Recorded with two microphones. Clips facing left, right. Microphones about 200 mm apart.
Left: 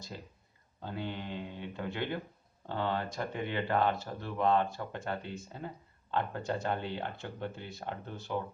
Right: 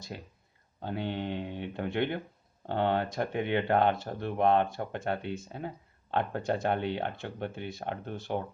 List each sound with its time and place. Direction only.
0.8 s speech: 65° right (ahead or behind)